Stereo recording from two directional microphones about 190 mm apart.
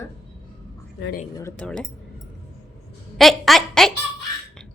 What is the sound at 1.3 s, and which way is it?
Speech, 15° left (ahead or behind).